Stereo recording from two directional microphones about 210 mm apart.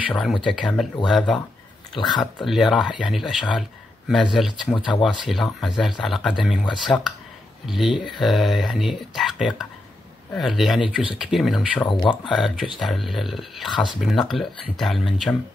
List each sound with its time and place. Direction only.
0.1 s speech: centre (ahead or behind)
4.7 s speech: 20° left (ahead or behind)
5.0 s speech: centre (ahead or behind)
11.9 s speech: 20° left (ahead or behind)
12.3 s speech: centre (ahead or behind)